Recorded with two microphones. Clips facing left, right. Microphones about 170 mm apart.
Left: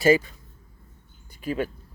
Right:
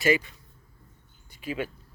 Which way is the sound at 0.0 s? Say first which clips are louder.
Left 5 dB; 40° left (ahead or behind).